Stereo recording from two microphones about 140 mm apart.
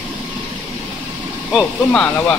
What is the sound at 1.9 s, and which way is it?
Speech, 10° left (ahead or behind).